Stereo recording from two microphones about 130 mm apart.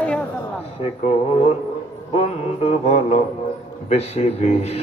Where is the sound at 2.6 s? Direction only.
55° left (ahead or behind).